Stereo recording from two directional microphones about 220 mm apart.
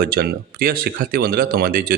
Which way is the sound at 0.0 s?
45° right (ahead or behind).